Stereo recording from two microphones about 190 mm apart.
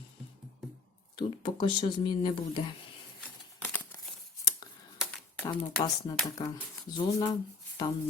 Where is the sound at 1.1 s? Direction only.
25° left (ahead or behind).